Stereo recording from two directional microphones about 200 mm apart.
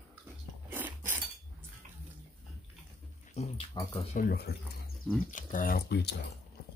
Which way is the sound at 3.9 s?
45° left (ahead or behind).